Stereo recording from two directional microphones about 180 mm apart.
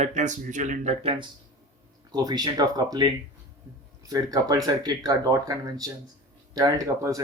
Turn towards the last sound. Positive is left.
turn(degrees=-20)  # may be behind; listen again after turning